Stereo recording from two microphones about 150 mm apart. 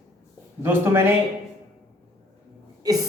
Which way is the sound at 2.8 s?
25° right (ahead or behind).